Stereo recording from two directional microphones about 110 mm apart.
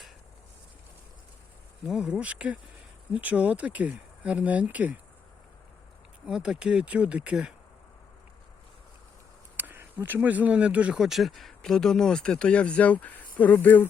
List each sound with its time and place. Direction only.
1.8 s speech: 5° right (ahead or behind)
6.2 s speech: 5° right (ahead or behind)
9.6 s insect: 15° right (ahead or behind)
10.0 s speech: 15° right (ahead or behind); by 13.8 s 15° left (ahead or behind)